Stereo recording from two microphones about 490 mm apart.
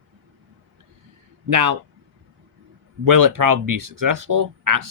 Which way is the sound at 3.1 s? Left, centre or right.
Right.